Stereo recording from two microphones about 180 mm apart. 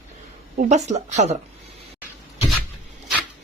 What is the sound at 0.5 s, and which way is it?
Speech, 40° right (ahead or behind).